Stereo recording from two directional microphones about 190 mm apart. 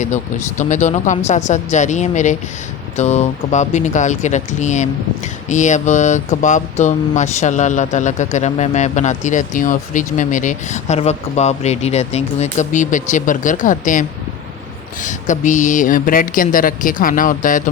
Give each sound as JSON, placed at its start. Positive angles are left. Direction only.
{"t": 0.0, "sound": "speech", "side_deg": 40}
{"t": 15.0, "sound": "a woman's voice", "side_deg": 40}